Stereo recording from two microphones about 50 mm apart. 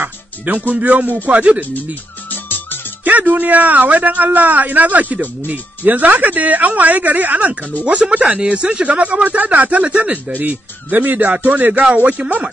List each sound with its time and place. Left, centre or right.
0.0 s a man's voice: right
3.0 s a man's voice: right
7.8 s speech: right